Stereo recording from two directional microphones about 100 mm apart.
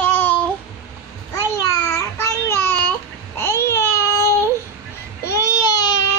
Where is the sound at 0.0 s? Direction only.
20° left (ahead or behind).